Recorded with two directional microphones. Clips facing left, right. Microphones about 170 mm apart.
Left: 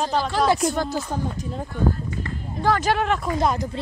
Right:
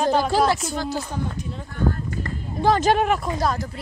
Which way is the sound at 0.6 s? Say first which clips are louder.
Left 4 dB; 55° left (ahead or behind).